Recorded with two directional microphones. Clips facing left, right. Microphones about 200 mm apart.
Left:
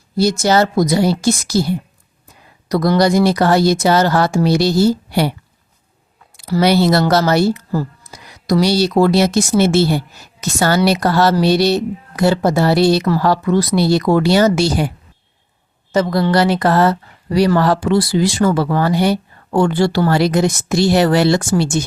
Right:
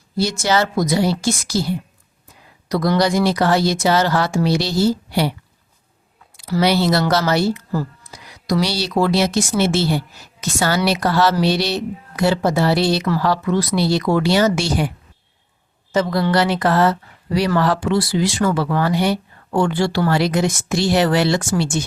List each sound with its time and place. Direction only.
0.2 s a woman's voice: 40° left (ahead or behind)
2.6 s speech: 40° left (ahead or behind)
6.3 s speech: 45° left (ahead or behind)
15.9 s a woman's voice: 40° left (ahead or behind)